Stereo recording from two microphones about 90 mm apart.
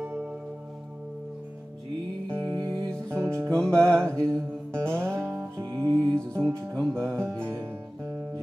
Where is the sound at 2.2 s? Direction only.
30° right (ahead or behind).